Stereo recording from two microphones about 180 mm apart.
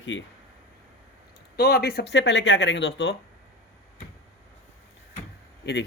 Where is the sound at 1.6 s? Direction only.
60° left (ahead or behind).